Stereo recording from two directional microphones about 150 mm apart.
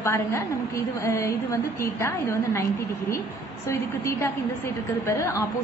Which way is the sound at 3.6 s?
15° left (ahead or behind).